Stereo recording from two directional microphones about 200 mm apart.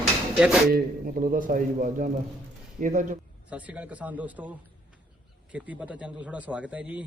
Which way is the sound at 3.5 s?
5° right (ahead or behind).